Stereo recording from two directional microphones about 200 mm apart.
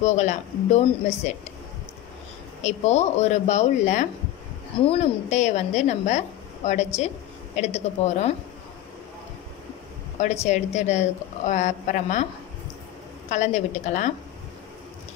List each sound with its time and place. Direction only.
0.0 s a woman's voice: 35° left (ahead or behind)
2.6 s a woman's voice: 35° left (ahead or behind)
10.1 s a woman's voice: 35° left (ahead or behind)
13.3 s a woman's voice: 35° left (ahead or behind)